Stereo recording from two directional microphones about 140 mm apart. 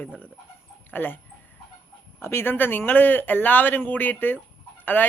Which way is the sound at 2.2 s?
15° left (ahead or behind).